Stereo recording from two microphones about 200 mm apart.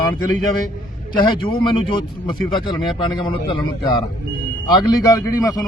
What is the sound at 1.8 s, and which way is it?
A man's voice, 25° left (ahead or behind).